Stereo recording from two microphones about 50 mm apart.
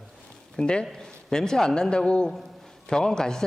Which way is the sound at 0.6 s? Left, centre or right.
Centre.